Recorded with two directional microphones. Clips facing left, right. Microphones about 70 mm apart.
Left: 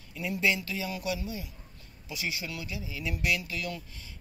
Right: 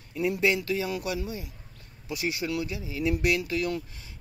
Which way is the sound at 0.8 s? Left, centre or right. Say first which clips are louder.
Right 3 dB; right.